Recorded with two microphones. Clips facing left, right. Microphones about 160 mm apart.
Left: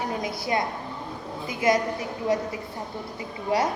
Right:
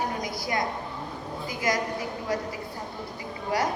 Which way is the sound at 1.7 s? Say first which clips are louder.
Left 6 dB; 25° left (ahead or behind).